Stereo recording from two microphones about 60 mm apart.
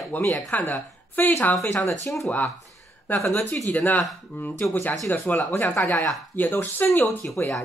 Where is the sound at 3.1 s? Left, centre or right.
Left.